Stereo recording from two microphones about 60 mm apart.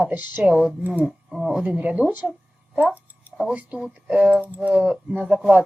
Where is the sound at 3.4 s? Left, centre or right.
Centre.